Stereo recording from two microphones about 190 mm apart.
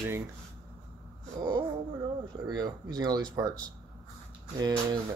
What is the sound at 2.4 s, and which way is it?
Speech, 20° right (ahead or behind).